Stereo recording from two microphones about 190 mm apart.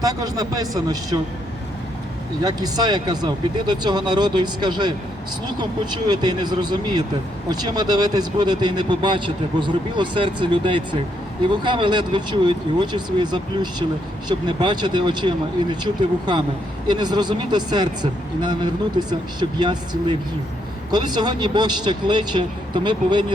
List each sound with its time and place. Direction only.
0.0 s speech: 20° right (ahead or behind)
2.4 s speech: 20° right (ahead or behind)